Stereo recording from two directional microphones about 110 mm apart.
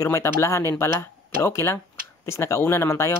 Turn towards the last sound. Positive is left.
turn(degrees=25)  # may be behind; listen again after turning